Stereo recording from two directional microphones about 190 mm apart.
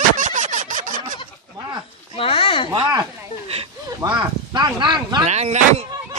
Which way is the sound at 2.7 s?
25° right (ahead or behind).